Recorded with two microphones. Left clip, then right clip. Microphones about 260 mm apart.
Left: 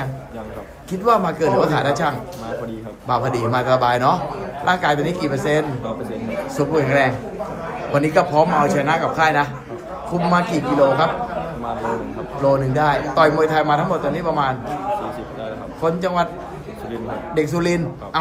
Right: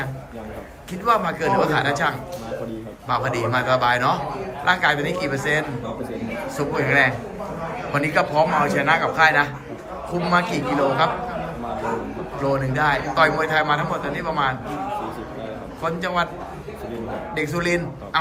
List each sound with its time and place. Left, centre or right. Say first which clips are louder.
1.0 s a man's voice: left 3 dB; centre
12.7 s a man's voice: left 3 dB; centre
15.8 s a man's voice: left 4 dB; centre
17.3 s a man's voice: left 3 dB; left